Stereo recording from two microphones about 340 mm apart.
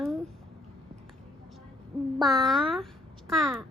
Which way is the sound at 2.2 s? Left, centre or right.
Centre.